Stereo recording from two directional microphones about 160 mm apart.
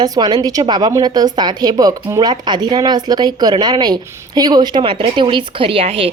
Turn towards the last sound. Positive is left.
turn(degrees=-35)  # may be behind; listen again after turning